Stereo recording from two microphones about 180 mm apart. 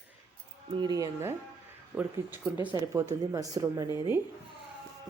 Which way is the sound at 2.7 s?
20° right (ahead or behind).